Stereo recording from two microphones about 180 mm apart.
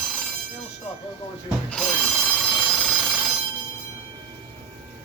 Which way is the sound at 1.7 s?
5° left (ahead or behind).